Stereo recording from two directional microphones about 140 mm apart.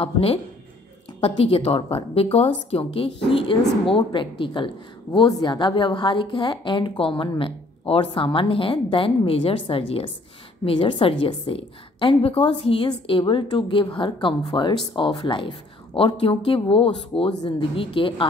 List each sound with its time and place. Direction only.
0.0 s a woman's voice: 45° left (ahead or behind)